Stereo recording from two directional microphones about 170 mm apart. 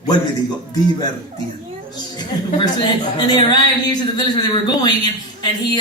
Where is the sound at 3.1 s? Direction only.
25° left (ahead or behind).